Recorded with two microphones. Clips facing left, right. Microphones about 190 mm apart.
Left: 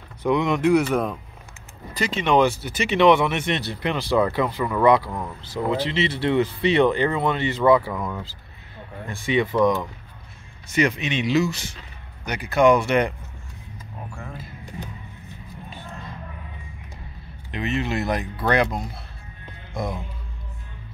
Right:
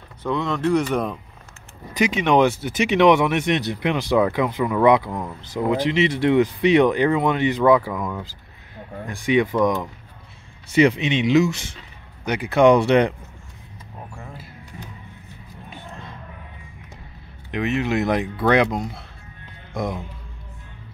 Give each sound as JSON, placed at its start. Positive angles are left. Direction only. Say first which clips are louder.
{"t": 0.2, "sound": "speech", "louder": "left 3 dB", "side_deg": 15}
{"t": 2.0, "sound": "speech", "louder": "right 2 dB", "side_deg": -15}
{"t": 7.9, "sound": "speech", "louder": "right 1 dB", "side_deg": 0}
{"t": 9.0, "sound": "speech", "louder": "right 3 dB", "side_deg": -15}
{"t": 17.6, "sound": "speech", "louder": "right 3 dB", "side_deg": -15}